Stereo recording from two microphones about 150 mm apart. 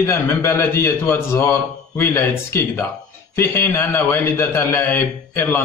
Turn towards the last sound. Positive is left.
turn(degrees=15)  # may be behind; listen again after turning